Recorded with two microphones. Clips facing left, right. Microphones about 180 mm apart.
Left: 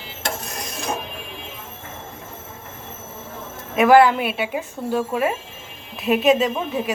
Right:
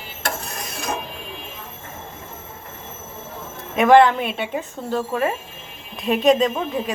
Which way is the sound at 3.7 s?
5° left (ahead or behind).